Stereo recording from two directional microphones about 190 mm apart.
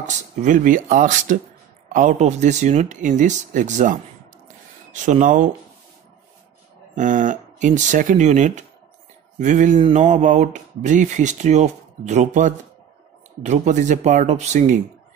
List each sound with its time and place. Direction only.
0.0 s speech: 40° right (ahead or behind)
7.0 s speech: 40° right (ahead or behind)